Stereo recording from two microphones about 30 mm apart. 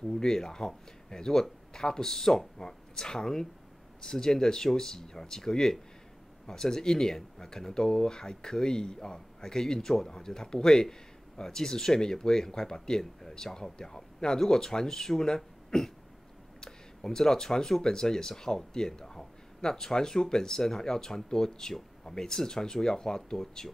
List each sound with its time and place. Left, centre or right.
0.1 s speech: centre